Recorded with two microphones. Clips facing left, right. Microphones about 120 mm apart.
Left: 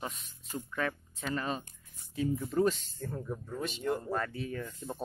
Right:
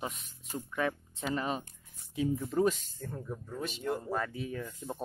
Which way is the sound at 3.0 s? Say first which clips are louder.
Left 2 dB; 5° left (ahead or behind).